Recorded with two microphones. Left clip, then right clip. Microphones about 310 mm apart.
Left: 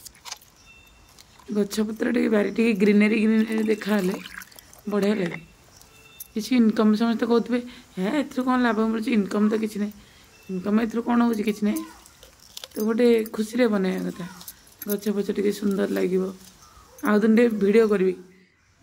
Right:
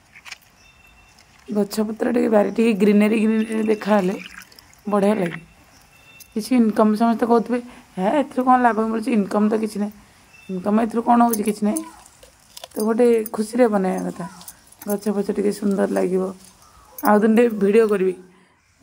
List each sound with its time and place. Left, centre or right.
1.5 s a woman's voice: centre
4.2 s water: centre
4.9 s a woman's voice: centre
6.3 s a woman's voice: centre